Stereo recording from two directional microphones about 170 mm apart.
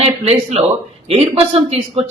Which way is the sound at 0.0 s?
35° right (ahead or behind).